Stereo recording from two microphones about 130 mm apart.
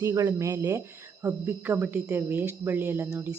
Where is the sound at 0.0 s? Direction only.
25° right (ahead or behind).